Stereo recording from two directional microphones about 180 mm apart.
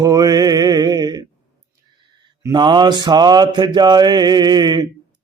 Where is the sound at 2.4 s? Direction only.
25° right (ahead or behind).